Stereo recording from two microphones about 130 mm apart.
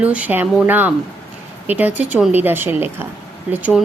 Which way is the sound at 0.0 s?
10° right (ahead or behind).